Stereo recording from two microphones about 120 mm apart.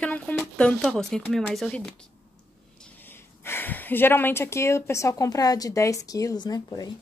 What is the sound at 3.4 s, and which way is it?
Speech, 15° left (ahead or behind).